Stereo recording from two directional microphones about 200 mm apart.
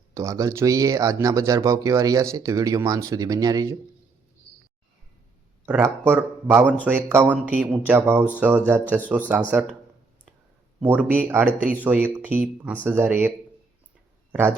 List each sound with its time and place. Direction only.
0.1 s speech: 15° right (ahead or behind)
5.6 s speech: 10° right (ahead or behind)
10.8 s speech: 10° right (ahead or behind)